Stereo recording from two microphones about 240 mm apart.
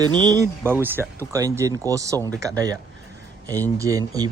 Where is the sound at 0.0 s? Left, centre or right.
Centre.